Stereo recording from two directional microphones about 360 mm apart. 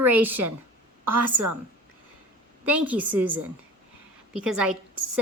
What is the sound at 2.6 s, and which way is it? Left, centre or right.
A woman's voice, centre.